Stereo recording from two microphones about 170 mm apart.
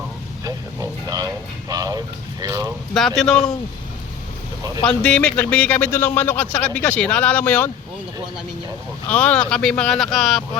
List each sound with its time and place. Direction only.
0.4 s a sound: 20° right (ahead or behind)
1.7 s boiling: 20° right (ahead or behind)
3.2 s speech: 5° left (ahead or behind)
4.9 s a man's voice: 5° left (ahead or behind)
9.0 s speech: 5° left (ahead or behind)